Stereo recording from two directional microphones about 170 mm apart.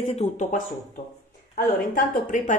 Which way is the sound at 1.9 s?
55° left (ahead or behind).